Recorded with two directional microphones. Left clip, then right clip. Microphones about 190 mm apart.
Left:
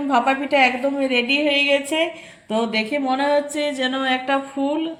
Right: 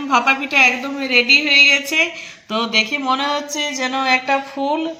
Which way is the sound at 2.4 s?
10° right (ahead or behind).